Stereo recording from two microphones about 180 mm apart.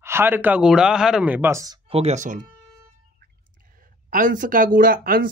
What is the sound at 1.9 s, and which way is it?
Speech, 40° right (ahead or behind).